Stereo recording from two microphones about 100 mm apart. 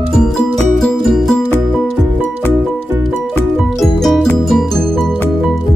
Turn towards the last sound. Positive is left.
turn(degrees=0)  # may be behind; listen again after turning